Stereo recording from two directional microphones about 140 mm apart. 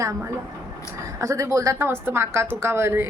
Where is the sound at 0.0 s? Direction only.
25° right (ahead or behind).